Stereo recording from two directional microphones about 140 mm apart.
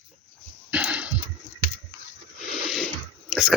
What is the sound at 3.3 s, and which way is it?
Chewing, 5° right (ahead or behind).